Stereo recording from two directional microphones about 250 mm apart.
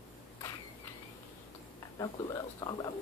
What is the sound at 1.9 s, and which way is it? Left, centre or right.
Speech, centre.